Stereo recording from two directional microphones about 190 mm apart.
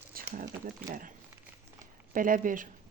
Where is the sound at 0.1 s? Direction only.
45° right (ahead or behind).